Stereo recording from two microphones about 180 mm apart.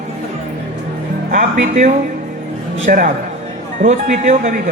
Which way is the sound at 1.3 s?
40° right (ahead or behind).